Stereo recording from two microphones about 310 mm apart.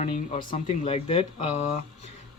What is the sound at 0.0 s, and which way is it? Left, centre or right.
Speech, centre.